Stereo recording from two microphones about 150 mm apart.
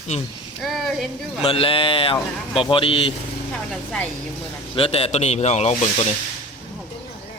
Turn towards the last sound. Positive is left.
turn(degrees=45)  # may be behind; listen again after turning